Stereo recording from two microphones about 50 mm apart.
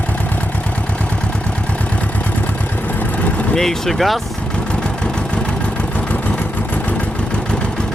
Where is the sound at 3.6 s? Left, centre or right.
Centre.